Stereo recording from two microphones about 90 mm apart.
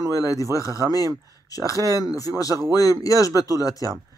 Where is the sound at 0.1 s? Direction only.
35° left (ahead or behind).